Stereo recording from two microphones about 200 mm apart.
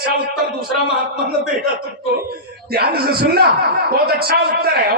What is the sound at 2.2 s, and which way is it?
Speech, 50° right (ahead or behind).